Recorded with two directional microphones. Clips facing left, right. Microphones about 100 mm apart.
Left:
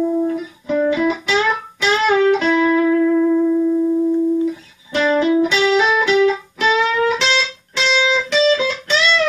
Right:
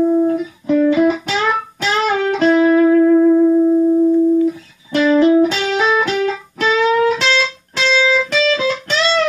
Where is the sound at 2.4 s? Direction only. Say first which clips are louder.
Right 4 dB; 45° right (ahead or behind).